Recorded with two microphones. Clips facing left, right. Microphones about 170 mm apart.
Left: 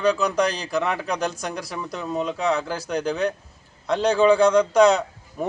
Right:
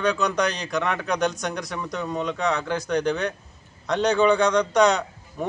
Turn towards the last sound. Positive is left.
turn(degrees=5)  # may be behind; listen again after turning